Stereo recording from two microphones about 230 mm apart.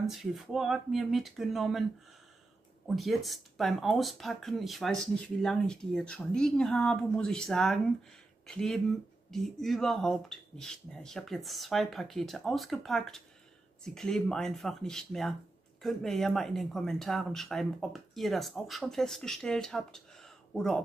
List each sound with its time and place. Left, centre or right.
0.0 s speech: centre
3.0 s speech: centre